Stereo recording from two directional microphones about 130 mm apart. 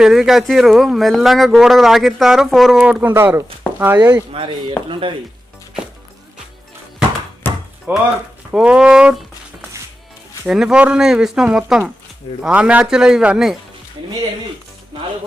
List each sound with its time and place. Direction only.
0.0 s speech: centre (ahead or behind)
2.8 s speech: 10° right (ahead or behind)
4.3 s speech: 45° right (ahead or behind)
7.4 s a sound: 15° left (ahead or behind)
7.9 s speech: 15° right (ahead or behind)